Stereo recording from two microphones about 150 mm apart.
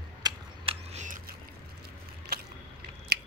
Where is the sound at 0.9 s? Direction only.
60° right (ahead or behind).